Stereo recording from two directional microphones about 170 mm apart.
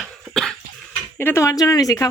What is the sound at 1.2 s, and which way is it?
Speech, 15° left (ahead or behind).